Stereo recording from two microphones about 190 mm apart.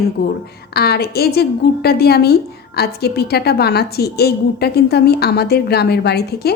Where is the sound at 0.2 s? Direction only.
60° left (ahead or behind).